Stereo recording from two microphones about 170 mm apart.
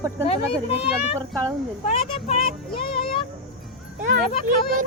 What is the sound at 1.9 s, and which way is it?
Speech, 35° left (ahead or behind).